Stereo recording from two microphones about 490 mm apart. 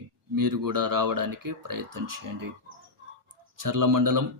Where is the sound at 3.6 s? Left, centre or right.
Right.